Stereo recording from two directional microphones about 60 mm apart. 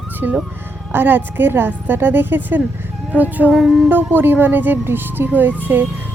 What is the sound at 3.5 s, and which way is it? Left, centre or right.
Music, centre.